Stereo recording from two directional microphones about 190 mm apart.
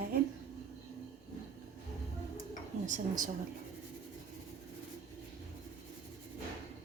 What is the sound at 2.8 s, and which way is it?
Speech, 45° right (ahead or behind).